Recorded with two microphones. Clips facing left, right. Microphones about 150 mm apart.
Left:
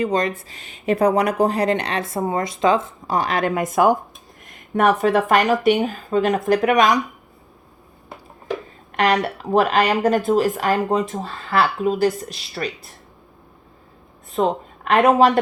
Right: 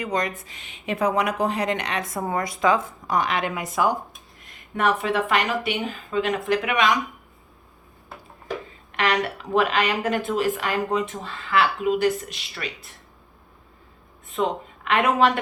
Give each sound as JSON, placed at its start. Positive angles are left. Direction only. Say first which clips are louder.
{"t": 0.0, "sound": "speech", "louder": "left 6 dB", "side_deg": 30}
{"t": 9.0, "sound": "speech", "louder": "left 5 dB", "side_deg": 40}
{"t": 14.3, "sound": "a woman's voice", "louder": "left 5 dB", "side_deg": 40}